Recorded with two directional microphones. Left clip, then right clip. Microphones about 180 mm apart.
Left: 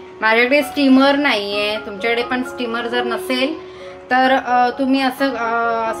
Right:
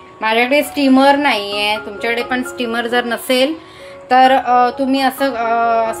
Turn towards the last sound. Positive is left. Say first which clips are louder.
# right 4 dB
turn(degrees=-10)  # may be behind; listen again after turning